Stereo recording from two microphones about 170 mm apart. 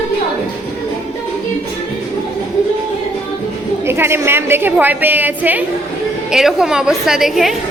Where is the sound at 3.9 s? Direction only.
15° right (ahead or behind).